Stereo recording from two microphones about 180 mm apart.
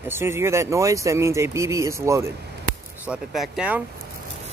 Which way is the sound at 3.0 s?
5° right (ahead or behind).